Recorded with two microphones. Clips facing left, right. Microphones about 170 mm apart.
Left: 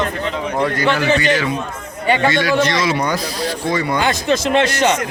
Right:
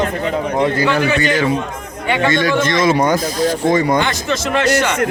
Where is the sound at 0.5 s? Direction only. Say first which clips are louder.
Right 2 dB; 25° right (ahead or behind).